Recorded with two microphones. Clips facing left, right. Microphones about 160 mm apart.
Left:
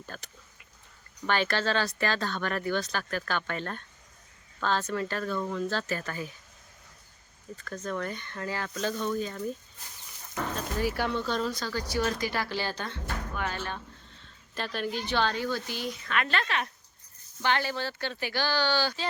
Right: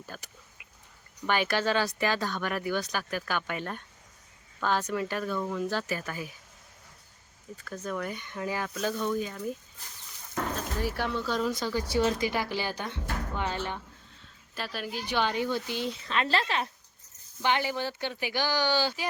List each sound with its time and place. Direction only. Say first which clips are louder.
0.0 s speech: even; 10° right (ahead or behind)
1.3 s speech: right 1 dB; 10° right (ahead or behind)
7.5 s speech: even; 10° right (ahead or behind)
10.8 s speech: left 3 dB; centre (ahead or behind)
11.5 s speech: right 3 dB; 20° right (ahead or behind)
14.5 s speech: left 3 dB; 5° right (ahead or behind); by 16.6 s 30° right (ahead or behind)
17.4 s speech: right 1 dB; 15° right (ahead or behind)